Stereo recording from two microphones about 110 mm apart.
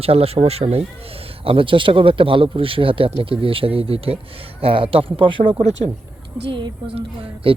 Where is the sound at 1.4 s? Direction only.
55° right (ahead or behind).